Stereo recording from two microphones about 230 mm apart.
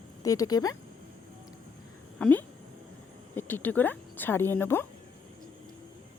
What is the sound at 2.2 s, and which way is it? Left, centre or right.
Speech, centre.